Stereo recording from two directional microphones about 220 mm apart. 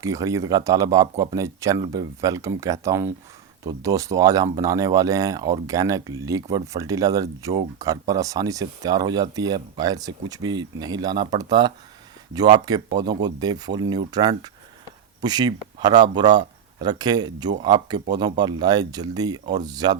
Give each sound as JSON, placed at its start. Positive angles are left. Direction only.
{"t": 0.0, "sound": "speech", "side_deg": -15}